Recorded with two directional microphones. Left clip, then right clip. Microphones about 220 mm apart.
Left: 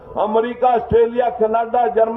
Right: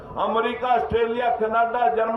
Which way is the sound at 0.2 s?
35° left (ahead or behind).